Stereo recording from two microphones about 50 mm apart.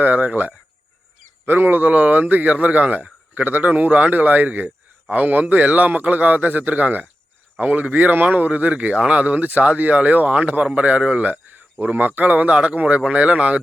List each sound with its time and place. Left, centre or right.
0.0 s speech: right
1.5 s speech: right